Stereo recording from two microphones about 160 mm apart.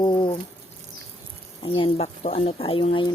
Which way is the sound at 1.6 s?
35° left (ahead or behind).